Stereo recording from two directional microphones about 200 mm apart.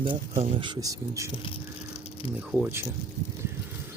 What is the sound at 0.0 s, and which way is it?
Speech, 25° right (ahead or behind).